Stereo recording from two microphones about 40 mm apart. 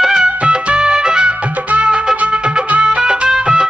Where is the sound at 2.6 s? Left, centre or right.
Right.